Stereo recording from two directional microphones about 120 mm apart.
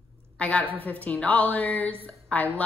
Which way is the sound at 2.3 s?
10° left (ahead or behind).